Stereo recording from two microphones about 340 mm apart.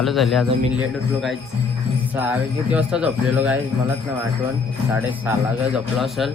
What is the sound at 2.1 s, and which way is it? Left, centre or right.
Speech, centre.